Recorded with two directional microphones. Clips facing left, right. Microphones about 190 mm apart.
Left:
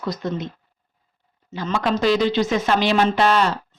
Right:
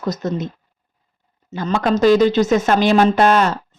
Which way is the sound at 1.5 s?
45° right (ahead or behind).